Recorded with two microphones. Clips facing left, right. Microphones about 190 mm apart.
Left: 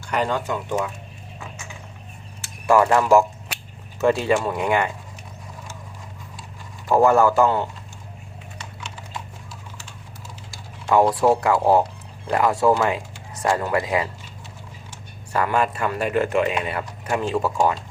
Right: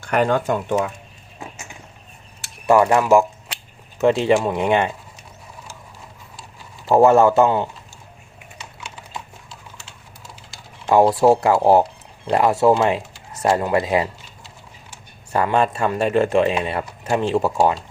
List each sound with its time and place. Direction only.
0.0 s speech: 55° right (ahead or behind)
2.6 s speech: 20° right (ahead or behind)
6.8 s speech: 25° right (ahead or behind)
10.5 s speech: 25° right (ahead or behind)
15.3 s speech: 25° right (ahead or behind)